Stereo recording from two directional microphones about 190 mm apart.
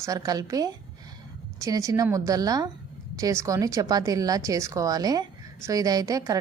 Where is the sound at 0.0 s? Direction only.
20° right (ahead or behind).